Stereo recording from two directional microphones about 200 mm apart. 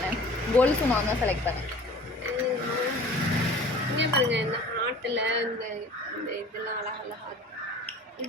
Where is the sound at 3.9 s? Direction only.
60° right (ahead or behind).